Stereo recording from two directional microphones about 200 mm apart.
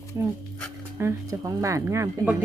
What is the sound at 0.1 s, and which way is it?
Speech, 15° right (ahead or behind).